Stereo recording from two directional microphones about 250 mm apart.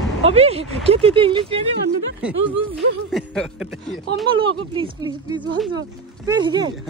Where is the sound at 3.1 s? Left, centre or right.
Centre.